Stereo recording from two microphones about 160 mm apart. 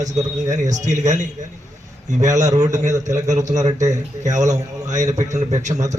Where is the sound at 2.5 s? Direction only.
25° right (ahead or behind).